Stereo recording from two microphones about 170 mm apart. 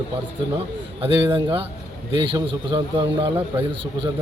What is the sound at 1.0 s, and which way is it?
A man's voice, 30° right (ahead or behind).